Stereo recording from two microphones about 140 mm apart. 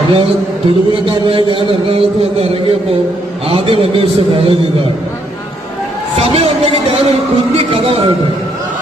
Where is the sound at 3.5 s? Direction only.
40° right (ahead or behind).